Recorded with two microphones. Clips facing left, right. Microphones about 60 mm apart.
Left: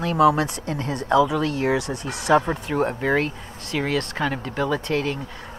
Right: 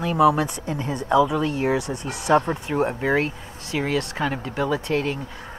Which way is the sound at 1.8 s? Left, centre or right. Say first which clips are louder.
Even; left.